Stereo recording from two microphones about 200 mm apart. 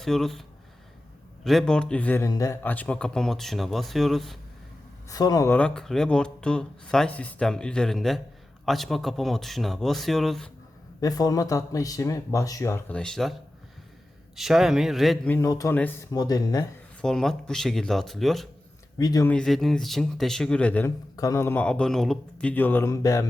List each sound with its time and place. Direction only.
0.0 s speech: centre (ahead or behind)
1.5 s speech: centre (ahead or behind)
5.0 s speech: 20° left (ahead or behind); by 10.5 s centre (ahead or behind)
11.0 s speech: 20° left (ahead or behind); by 13.3 s centre (ahead or behind)
14.3 s speech: centre (ahead or behind); by 16.6 s 20° left (ahead or behind)
17.0 s speech: 5° left (ahead or behind)
18.9 s speech: 20° left (ahead or behind)
19.3 s speech: 5° left (ahead or behind)